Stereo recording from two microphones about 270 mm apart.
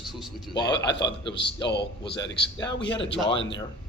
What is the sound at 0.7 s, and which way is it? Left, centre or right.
Speech, left.